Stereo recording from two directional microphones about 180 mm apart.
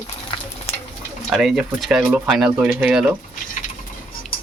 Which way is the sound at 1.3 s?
Centre (ahead or behind).